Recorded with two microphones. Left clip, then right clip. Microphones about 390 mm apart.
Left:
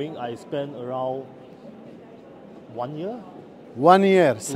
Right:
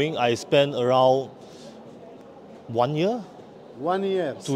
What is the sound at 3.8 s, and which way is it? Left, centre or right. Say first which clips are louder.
Speech: left 10 dB; left.